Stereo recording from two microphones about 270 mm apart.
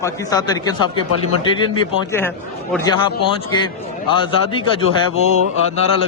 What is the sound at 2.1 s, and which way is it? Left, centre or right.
Speech, centre.